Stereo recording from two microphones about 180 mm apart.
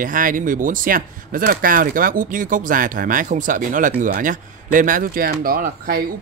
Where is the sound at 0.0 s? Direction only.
50° right (ahead or behind).